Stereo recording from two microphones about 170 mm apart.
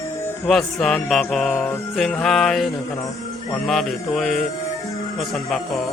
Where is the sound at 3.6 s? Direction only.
Centre (ahead or behind).